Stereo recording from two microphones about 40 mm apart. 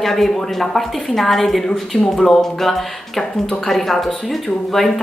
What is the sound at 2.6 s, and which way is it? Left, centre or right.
Speech, centre.